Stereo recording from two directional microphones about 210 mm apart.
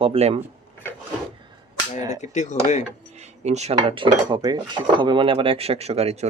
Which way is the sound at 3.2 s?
30° right (ahead or behind).